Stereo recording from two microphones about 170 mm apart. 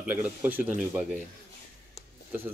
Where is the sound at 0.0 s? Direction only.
10° right (ahead or behind).